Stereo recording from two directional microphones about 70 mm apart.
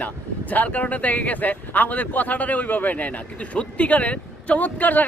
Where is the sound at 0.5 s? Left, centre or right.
Left.